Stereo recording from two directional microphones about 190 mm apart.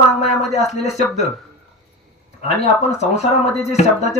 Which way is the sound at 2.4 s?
35° left (ahead or behind).